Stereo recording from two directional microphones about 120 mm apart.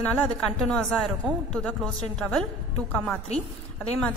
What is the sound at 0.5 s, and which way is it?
Speech, 5° left (ahead or behind).